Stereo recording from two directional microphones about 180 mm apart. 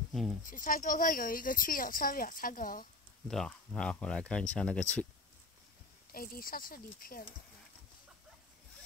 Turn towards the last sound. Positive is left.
turn(degrees=55)  # may be behind; listen again after turning